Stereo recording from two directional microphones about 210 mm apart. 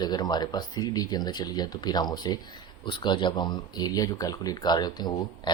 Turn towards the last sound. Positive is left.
turn(degrees=20)  # may be behind; listen again after turning